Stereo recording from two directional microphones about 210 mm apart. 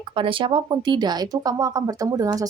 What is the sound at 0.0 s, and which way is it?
Speech, 25° right (ahead or behind).